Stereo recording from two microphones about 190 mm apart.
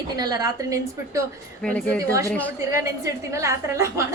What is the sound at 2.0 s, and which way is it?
Speech, 15° right (ahead or behind).